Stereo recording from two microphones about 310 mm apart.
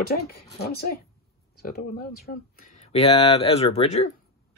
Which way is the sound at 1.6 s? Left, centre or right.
Left.